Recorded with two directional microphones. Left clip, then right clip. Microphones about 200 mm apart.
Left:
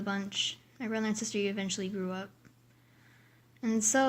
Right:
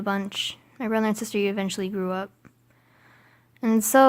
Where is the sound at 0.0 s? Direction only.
50° right (ahead or behind).